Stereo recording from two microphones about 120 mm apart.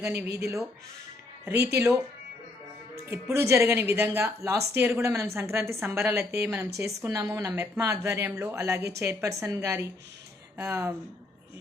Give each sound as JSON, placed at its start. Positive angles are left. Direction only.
{"t": 0.0, "sound": "speech", "side_deg": -20}